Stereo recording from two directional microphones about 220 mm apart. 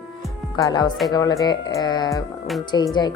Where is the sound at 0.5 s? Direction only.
20° left (ahead or behind).